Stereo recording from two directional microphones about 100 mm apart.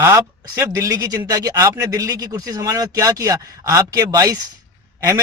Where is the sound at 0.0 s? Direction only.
25° right (ahead or behind).